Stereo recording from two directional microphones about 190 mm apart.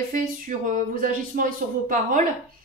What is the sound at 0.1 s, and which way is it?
Speech, 45° right (ahead or behind).